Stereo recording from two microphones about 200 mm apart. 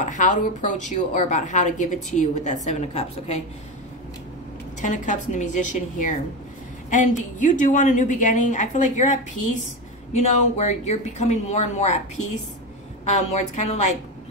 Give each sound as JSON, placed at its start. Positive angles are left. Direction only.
{"t": 0.0, "sound": "a woman's voice", "side_deg": 40}
{"t": 4.8, "sound": "a woman's voice", "side_deg": 40}